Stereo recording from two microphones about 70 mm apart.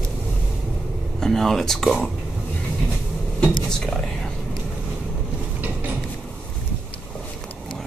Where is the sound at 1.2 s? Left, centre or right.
Centre.